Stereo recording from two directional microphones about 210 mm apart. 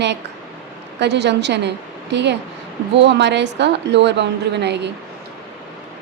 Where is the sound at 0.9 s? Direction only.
55° right (ahead or behind).